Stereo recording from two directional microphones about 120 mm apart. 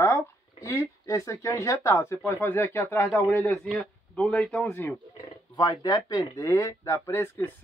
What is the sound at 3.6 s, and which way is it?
Speech, 5° left (ahead or behind).